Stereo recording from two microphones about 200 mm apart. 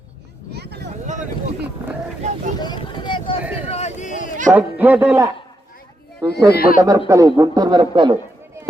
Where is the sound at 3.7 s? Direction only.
35° left (ahead or behind).